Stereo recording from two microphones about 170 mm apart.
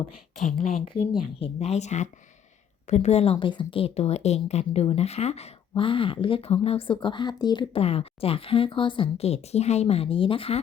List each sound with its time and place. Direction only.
0.4 s speech: 55° left (ahead or behind)
1.4 s a woman's voice: 40° left (ahead or behind)